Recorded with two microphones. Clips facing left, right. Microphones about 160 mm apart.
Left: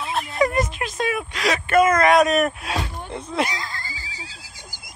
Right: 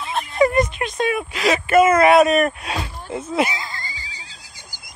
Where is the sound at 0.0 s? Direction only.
Centre (ahead or behind).